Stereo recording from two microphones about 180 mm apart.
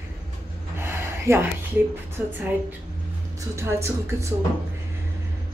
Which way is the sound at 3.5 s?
15° right (ahead or behind).